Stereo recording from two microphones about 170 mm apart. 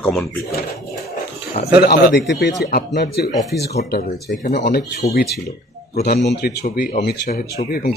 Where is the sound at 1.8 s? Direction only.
70° left (ahead or behind).